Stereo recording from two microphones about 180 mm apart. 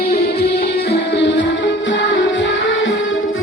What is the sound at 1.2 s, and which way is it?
Music, 80° left.